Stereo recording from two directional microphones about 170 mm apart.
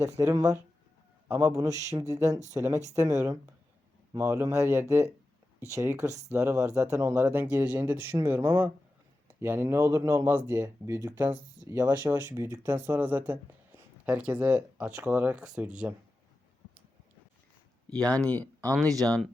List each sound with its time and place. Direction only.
0.2 s speech: 15° right (ahead or behind)
17.8 s speech: 5° left (ahead or behind)
18.7 s speech: 20° right (ahead or behind)
19.0 s speech: 5° left (ahead or behind)